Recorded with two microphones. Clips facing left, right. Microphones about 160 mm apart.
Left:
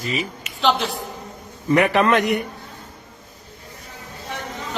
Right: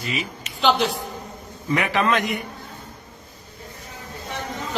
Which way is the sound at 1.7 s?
55° left (ahead or behind).